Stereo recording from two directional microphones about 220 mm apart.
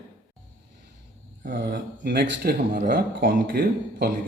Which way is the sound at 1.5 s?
50° right (ahead or behind).